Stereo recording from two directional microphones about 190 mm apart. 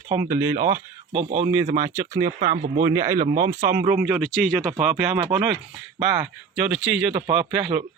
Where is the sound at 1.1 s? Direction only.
40° right (ahead or behind).